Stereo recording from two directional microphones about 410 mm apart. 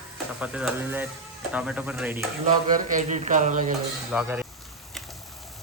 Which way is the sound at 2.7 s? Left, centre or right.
Centre.